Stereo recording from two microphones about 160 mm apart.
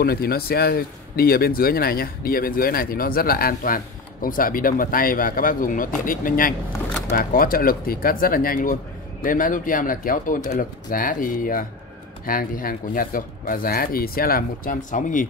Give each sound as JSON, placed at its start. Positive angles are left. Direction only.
{"t": 0.0, "sound": "speech", "side_deg": 75}